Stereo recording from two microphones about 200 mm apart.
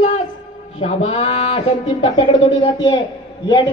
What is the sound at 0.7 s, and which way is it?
A woman's voice, 30° left (ahead or behind).